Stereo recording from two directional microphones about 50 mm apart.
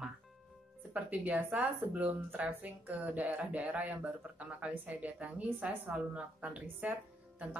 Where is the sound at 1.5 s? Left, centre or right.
Right.